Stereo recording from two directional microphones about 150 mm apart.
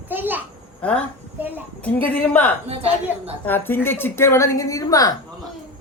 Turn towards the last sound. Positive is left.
turn(degrees=25)  # may be behind; listen again after turning